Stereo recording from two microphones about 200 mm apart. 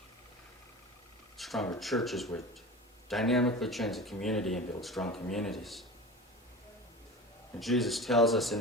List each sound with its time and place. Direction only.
1.4 s a sound: centre (ahead or behind)
1.8 s speech: centre (ahead or behind)
7.6 s speech: centre (ahead or behind)